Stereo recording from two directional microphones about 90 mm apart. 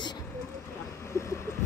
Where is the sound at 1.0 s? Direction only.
35° left (ahead or behind).